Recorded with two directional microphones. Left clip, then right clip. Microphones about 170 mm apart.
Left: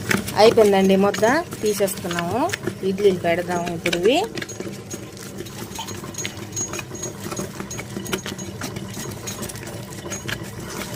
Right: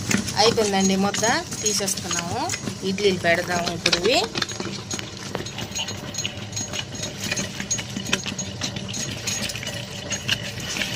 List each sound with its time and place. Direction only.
0.3 s speech: 45° left (ahead or behind)
2.8 s speech: 20° left (ahead or behind)